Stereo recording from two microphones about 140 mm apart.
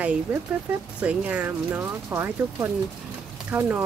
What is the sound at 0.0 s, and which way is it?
A woman's voice, 10° right (ahead or behind).